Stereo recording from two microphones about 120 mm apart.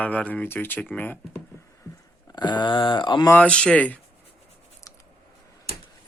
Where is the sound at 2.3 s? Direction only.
35° left (ahead or behind).